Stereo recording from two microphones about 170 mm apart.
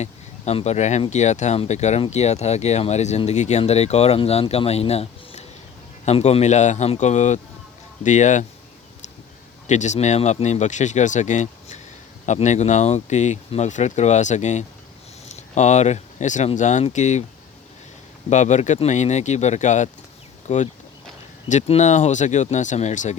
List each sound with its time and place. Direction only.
0.0 s speech: 40° left (ahead or behind)
9.6 s speech: 45° left (ahead or behind)
18.3 s speech: 45° left (ahead or behind)